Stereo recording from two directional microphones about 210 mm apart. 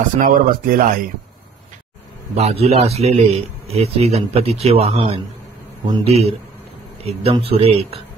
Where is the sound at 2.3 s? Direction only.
30° right (ahead or behind).